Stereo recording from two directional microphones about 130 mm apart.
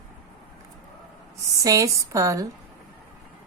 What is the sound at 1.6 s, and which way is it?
Speech, 25° right (ahead or behind).